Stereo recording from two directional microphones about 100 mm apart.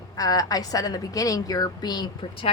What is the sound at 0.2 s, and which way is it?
A woman's voice, 35° left (ahead or behind).